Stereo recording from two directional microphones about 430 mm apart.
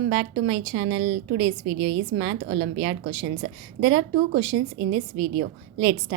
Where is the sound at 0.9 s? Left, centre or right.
Right.